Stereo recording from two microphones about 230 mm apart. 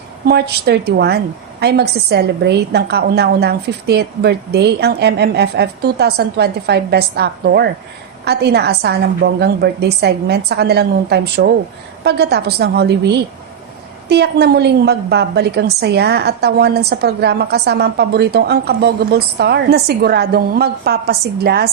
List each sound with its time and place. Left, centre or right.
0.3 s a woman's voice: right